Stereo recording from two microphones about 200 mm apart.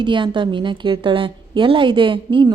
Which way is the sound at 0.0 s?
25° right (ahead or behind).